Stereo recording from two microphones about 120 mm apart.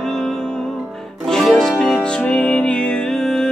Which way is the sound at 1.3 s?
5° left (ahead or behind).